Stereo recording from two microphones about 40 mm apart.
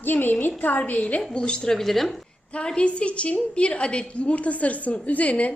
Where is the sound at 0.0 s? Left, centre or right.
Left.